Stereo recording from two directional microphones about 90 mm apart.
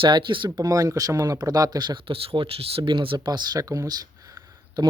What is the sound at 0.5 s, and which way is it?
Speech, 45° right (ahead or behind).